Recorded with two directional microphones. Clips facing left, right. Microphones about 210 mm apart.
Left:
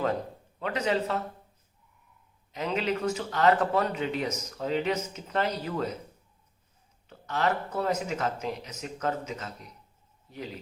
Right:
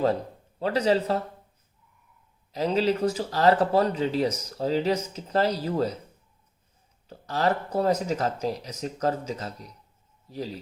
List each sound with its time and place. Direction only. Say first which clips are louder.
0.6 s speech: right 5 dB; 35° right (ahead or behind)
2.5 s speech: right 5 dB; 35° right (ahead or behind)
7.1 s speech: right 3 dB; 35° right (ahead or behind)